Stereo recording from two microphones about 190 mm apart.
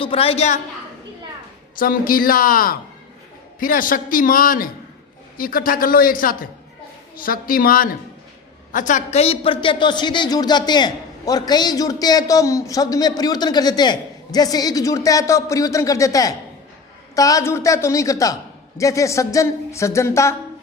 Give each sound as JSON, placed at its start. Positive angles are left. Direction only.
{"t": 0.0, "sound": "a woman's voice", "side_deg": 30}
{"t": 1.8, "sound": "a man's voice", "side_deg": 50}
{"t": 17.2, "sound": "a sound", "side_deg": 15}